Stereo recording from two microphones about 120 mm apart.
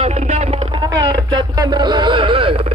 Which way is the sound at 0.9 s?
35° right (ahead or behind).